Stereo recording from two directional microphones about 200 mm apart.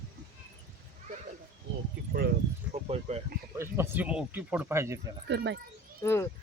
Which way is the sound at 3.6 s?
15° right (ahead or behind).